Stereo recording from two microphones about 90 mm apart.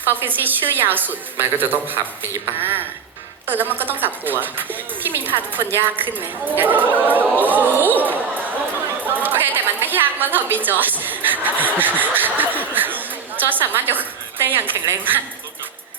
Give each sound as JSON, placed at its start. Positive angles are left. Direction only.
{"t": 0.0, "sound": "a woman's voice", "side_deg": -20}